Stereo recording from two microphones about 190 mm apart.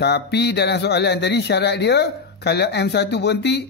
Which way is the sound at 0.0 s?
60° left (ahead or behind).